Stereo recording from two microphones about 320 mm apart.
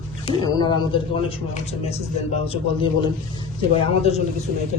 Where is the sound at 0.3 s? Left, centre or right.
Centre.